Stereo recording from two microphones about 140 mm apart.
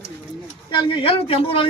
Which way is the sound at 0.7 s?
40° left (ahead or behind).